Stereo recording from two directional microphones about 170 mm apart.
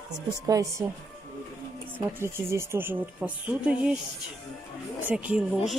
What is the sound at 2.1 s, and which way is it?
Speech, 15° right (ahead or behind).